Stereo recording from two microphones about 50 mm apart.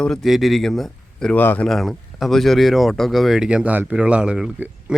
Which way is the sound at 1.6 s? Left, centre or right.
Centre.